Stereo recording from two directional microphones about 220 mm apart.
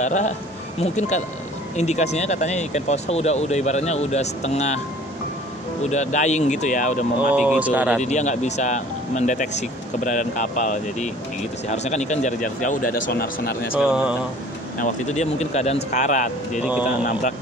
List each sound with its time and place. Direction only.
0.0 s speech: 35° left (ahead or behind)
5.9 s speech: 30° left (ahead or behind)
7.3 s speech: 5° right (ahead or behind)
8.0 s a man's voice: 30° left (ahead or behind)
13.7 s speech: 5° right (ahead or behind)
14.8 s speech: 35° left (ahead or behind)